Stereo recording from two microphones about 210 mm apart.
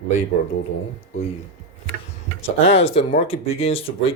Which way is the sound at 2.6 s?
30° left (ahead or behind).